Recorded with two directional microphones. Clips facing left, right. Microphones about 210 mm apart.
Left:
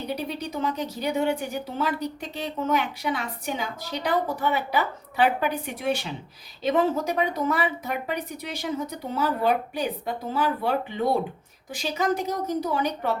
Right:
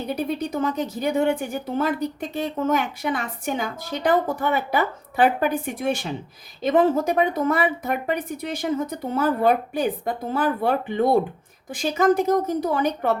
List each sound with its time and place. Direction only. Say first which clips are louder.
0.1 s a woman's voice: right 7 dB; 50° right (ahead or behind)